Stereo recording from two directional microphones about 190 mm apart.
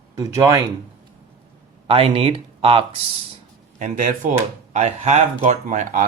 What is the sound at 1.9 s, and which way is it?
Speech, 30° right (ahead or behind).